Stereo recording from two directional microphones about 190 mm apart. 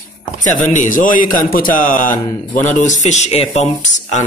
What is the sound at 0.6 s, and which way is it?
A man's voice, 40° left (ahead or behind).